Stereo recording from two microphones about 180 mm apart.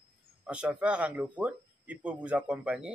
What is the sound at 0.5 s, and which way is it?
Speech, 5° right (ahead or behind).